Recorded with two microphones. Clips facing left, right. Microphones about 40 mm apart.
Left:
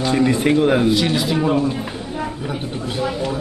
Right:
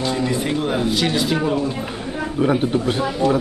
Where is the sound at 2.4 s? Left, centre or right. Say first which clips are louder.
Right 8 dB; right.